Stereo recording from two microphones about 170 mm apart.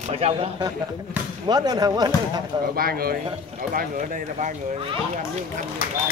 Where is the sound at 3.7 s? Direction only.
45° right (ahead or behind).